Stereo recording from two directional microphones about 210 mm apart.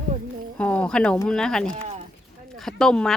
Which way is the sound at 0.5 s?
5° left (ahead or behind).